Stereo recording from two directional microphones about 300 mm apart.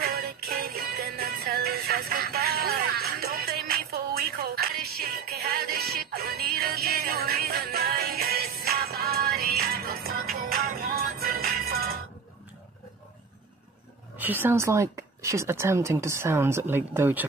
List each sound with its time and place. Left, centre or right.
0.0 s music: right
14.1 s a woman's voice: centre